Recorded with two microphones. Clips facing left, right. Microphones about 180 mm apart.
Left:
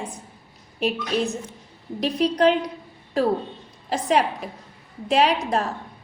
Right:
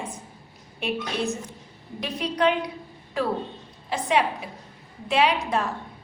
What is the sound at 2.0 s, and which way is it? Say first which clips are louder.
Speech: left 5 dB; 35° left (ahead or behind).